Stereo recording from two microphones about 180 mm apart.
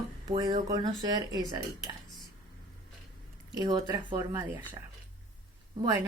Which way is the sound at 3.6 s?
20° right (ahead or behind).